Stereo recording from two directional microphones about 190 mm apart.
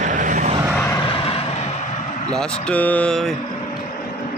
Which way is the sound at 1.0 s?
30° left (ahead or behind).